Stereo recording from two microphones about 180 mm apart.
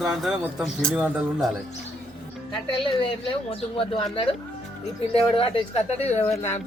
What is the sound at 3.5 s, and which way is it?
Speech, 30° left (ahead or behind).